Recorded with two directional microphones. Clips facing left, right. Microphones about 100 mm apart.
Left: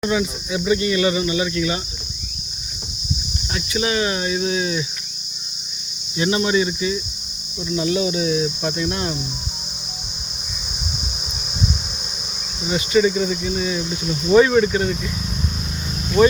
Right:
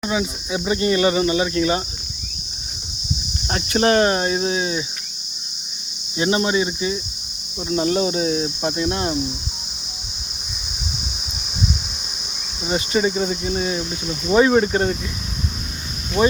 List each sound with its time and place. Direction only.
0.1 s speech: 20° right (ahead or behind)
3.5 s speech: 50° right (ahead or behind); by 4.9 s 25° right (ahead or behind)
6.1 s cricket: 30° right (ahead or behind)
7.7 s speech: 40° right (ahead or behind)
12.6 s cricket: 30° right (ahead or behind)
14.7 s speech: 35° right (ahead or behind)
16.2 s cricket: 20° right (ahead or behind)